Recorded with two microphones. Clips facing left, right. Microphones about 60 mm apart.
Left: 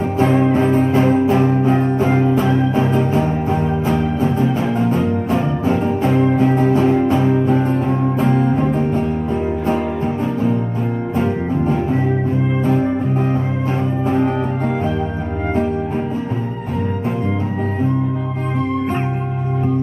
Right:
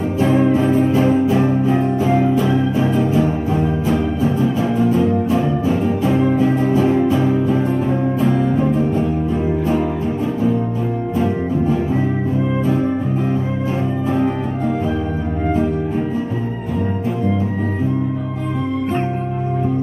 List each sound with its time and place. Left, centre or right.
0.5 s music: left
2.7 s organ: left
3.8 s music: left
8.2 s music: left
11.1 s music: left